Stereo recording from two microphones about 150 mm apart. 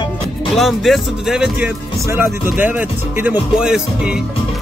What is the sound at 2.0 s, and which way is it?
Speech, 15° right (ahead or behind).